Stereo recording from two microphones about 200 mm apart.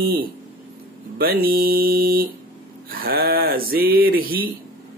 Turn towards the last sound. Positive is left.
turn(degrees=-45)  # may be behind; listen again after turning